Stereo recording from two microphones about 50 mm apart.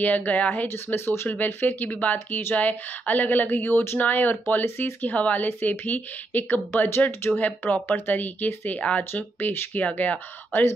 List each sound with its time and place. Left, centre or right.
0.0 s speech: left
0.9 s speech: left
1.4 s speech: left
4.0 s speech: left
9.1 s speech: left
9.8 s speech: left